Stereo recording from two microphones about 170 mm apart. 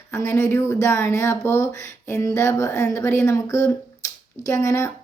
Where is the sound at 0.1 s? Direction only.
15° left (ahead or behind).